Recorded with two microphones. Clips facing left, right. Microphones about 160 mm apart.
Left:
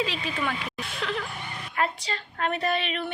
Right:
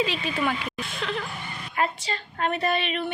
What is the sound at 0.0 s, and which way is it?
A woman's voice, 5° right (ahead or behind).